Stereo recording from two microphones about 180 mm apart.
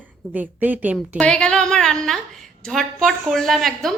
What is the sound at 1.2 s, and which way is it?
A woman's voice, 5° left (ahead or behind).